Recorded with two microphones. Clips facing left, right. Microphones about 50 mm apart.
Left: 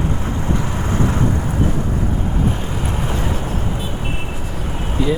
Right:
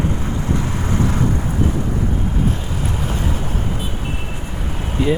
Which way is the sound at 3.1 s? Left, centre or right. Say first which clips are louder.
Left 1 dB; centre.